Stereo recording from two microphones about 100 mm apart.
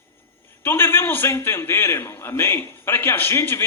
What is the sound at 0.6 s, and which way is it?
A man's voice, 20° left (ahead or behind).